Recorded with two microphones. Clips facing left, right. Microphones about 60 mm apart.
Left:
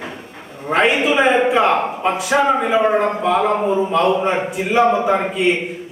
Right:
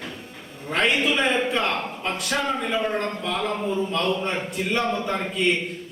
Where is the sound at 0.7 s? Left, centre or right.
Centre.